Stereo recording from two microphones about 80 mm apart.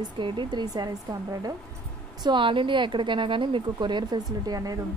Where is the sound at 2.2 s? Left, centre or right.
Right.